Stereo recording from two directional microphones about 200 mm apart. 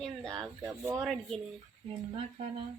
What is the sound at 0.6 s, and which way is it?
Speech, 15° right (ahead or behind).